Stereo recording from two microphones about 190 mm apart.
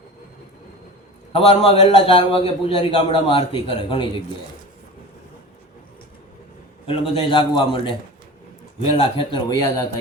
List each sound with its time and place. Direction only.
1.3 s a man's voice: 30° left (ahead or behind)
6.8 s a man's voice: 30° left (ahead or behind)
9.0 s a man's voice: 25° left (ahead or behind)